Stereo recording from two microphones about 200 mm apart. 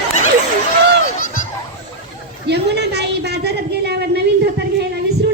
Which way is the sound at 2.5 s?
55° right (ahead or behind).